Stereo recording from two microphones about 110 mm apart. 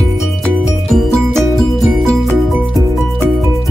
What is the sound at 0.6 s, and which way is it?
Music, centre (ahead or behind).